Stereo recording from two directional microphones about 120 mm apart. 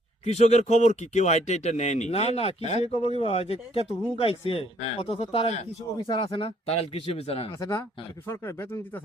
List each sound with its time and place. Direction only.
0.3 s speech: 70° left (ahead or behind)
6.0 s speech: 45° left (ahead or behind)
7.6 s speech: 25° left (ahead or behind)